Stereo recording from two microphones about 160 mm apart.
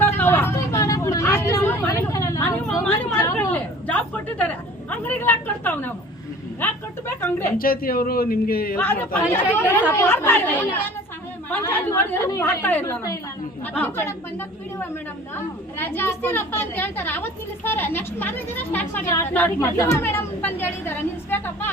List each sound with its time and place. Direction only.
0.0 s hubbub: 15° left (ahead or behind)
2.8 s a sound: 10° left (ahead or behind)
3.3 s a woman's voice: 10° left (ahead or behind)
6.6 s a sound: 15° left (ahead or behind)
7.2 s a woman's voice: 15° left (ahead or behind)
7.6 s a man's voice: 65° left (ahead or behind)
8.8 s a woman's voice: 15° left (ahead or behind)